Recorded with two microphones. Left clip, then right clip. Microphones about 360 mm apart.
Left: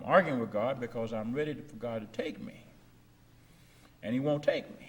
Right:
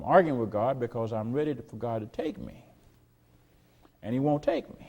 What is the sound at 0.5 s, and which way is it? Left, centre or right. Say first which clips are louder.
A man's voice: right 5 dB; right.